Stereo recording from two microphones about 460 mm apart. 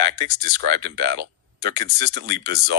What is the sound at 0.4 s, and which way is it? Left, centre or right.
Speech, centre.